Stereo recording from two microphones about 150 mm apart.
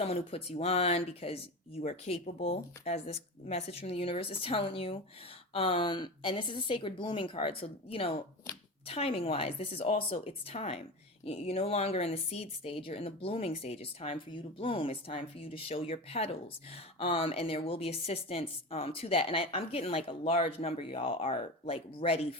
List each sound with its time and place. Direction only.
0.0 s a woman's voice: 40° left (ahead or behind)